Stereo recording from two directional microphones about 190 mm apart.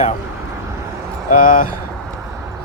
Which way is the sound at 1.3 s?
45° left (ahead or behind).